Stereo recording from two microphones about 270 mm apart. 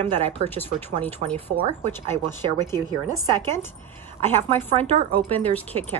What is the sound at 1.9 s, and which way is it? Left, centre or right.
Speech, centre.